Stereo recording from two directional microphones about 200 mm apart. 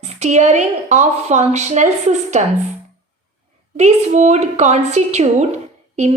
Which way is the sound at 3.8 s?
35° right (ahead or behind).